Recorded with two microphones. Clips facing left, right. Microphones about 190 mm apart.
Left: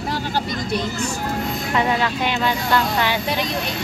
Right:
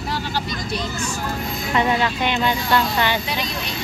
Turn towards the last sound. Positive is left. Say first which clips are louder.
# even
turn(degrees=0)  # may be behind; listen again after turning